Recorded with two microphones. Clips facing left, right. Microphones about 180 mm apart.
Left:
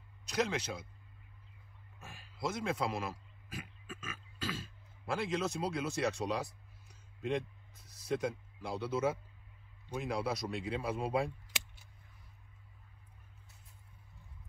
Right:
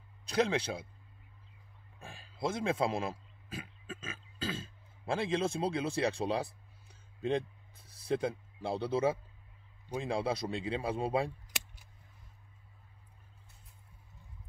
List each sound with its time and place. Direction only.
0.2 s speech: 30° right (ahead or behind)
2.0 s a man's voice: 30° right (ahead or behind)
7.2 s a sound: 30° right (ahead or behind)
10.0 s speech: 25° right (ahead or behind)